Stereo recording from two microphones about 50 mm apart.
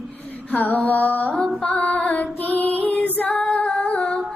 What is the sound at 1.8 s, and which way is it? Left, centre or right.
Female singing, left.